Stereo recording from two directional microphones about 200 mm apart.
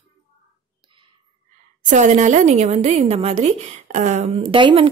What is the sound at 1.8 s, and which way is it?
A woman's voice, 35° right (ahead or behind).